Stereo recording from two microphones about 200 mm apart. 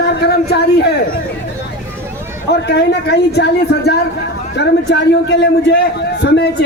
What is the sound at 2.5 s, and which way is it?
A man's voice, 55° left (ahead or behind).